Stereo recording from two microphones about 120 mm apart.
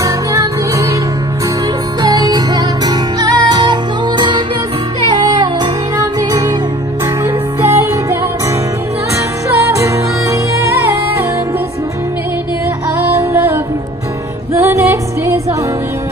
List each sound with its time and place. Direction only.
0.0 s music: 25° right (ahead or behind)
2.0 s music: 30° right (ahead or behind)
5.0 s music: 35° right (ahead or behind)
7.2 s music: 20° right (ahead or behind)
9.6 s music: 25° right (ahead or behind)
13.2 s music: 20° right (ahead or behind)